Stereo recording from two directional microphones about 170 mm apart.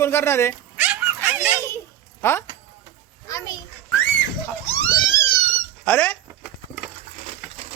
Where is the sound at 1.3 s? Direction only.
10° right (ahead or behind).